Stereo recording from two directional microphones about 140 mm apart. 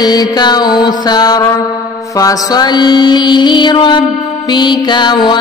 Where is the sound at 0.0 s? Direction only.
30° left (ahead or behind).